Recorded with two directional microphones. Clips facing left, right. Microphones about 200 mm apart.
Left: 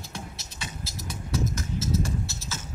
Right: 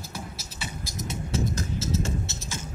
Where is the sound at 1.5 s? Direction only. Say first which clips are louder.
Even; 30° right (ahead or behind).